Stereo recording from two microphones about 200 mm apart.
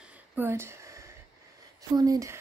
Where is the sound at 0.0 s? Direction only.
10° right (ahead or behind).